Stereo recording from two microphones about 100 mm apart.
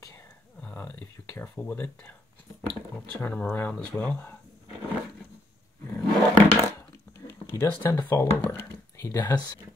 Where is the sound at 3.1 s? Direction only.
20° left (ahead or behind).